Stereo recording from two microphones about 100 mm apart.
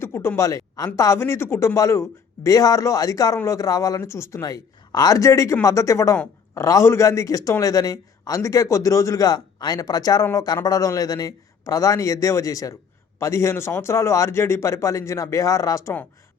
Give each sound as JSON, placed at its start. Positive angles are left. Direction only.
{"t": 0.0, "sound": "a man's voice", "side_deg": 25}